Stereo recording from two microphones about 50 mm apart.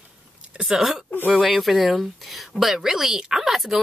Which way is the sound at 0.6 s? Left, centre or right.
Centre.